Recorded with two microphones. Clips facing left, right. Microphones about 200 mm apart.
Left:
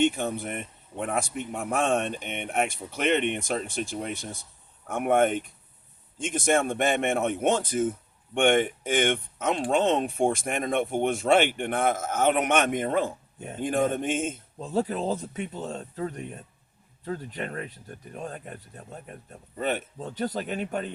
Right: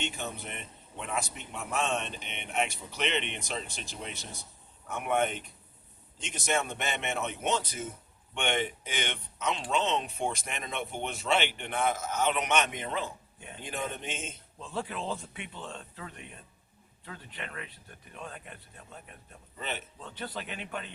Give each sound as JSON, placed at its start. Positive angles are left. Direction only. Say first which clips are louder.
{"t": 0.0, "sound": "speech", "louder": "left 12 dB", "side_deg": 50}